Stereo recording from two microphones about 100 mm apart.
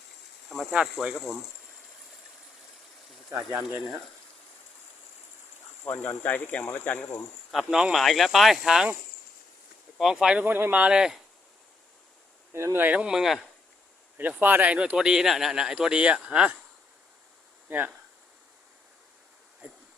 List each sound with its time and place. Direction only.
0.5 s speech: 5° right (ahead or behind)
3.2 s speech: 25° right (ahead or behind)
5.8 s speech: 20° left (ahead or behind)
7.7 s speech: 5° right (ahead or behind)
10.0 s speech: 5° right (ahead or behind)
10.4 s speech: 20° right (ahead or behind)
12.5 s speech: 25° right (ahead or behind); by 13.5 s centre (ahead or behind)
14.2 s speech: 15° right (ahead or behind)
17.7 s speech: 15° right (ahead or behind)